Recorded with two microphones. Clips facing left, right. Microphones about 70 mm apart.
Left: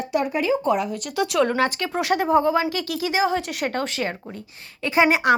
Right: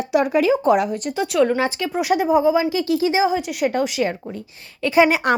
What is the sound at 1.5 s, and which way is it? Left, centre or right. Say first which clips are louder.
A woman's voice: right 1 dB; centre.